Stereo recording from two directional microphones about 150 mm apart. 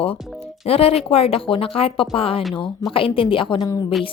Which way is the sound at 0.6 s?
40° left (ahead or behind).